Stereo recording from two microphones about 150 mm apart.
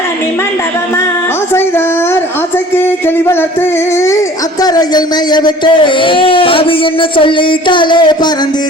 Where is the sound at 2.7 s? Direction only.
15° left (ahead or behind).